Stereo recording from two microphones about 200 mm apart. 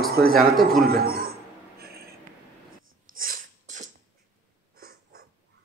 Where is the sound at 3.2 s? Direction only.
40° right (ahead or behind).